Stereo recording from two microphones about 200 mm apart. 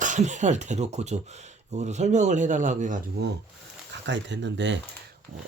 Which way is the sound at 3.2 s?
55° right (ahead or behind).